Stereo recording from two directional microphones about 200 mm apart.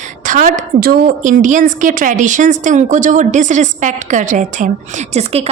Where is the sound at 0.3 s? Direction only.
40° right (ahead or behind).